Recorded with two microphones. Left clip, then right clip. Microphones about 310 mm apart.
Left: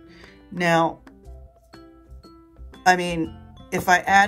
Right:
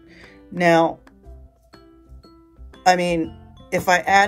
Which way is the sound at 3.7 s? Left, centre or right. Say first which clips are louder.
Right 1 dB; centre.